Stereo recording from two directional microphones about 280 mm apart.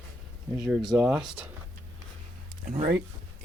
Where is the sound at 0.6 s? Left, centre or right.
Centre.